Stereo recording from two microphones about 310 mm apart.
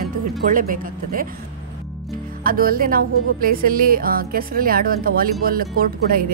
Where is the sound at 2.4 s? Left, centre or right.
Right.